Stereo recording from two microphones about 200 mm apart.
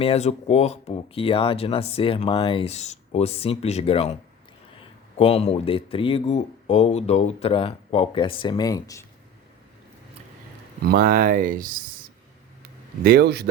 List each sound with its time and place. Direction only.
0.0 s speech: 30° left (ahead or behind)
10.8 s speech: 45° right (ahead or behind)
13.0 s speech: 50° right (ahead or behind)